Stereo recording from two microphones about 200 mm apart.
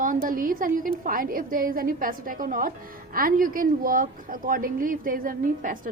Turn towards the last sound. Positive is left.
turn(degrees=-45)  # may be behind; listen again after turning